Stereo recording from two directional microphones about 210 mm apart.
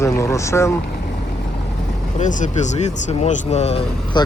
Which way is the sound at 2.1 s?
35° left (ahead or behind).